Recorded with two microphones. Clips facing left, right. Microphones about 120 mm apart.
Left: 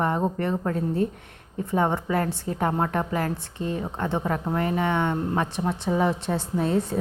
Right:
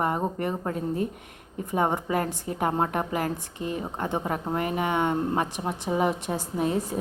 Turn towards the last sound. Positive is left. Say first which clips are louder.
# left 2 dB
turn(degrees=-15)  # may be behind; listen again after turning